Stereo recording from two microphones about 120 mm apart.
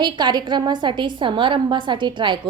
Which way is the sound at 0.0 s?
35° right (ahead or behind).